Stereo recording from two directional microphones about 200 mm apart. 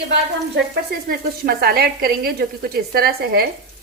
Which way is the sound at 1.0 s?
50° right (ahead or behind).